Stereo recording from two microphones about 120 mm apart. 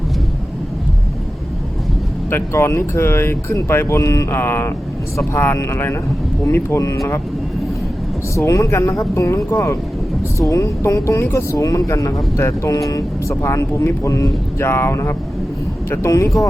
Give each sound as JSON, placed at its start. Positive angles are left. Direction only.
{"t": 2.3, "sound": "speech", "side_deg": 20}
{"t": 8.4, "sound": "speech", "side_deg": 25}